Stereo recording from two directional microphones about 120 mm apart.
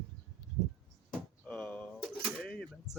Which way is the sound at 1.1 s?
10° left (ahead or behind).